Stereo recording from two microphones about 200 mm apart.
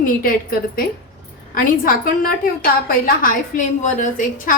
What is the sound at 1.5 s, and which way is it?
A woman's voice, 45° left (ahead or behind).